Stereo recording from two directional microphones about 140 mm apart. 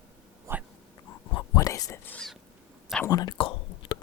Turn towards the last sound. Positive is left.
turn(degrees=40)  # may be behind; listen again after turning